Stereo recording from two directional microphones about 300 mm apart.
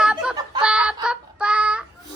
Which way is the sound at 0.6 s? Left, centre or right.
Centre.